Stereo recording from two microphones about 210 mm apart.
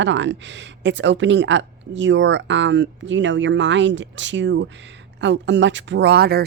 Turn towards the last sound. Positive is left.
turn(degrees=-50)  # may be behind; listen again after turning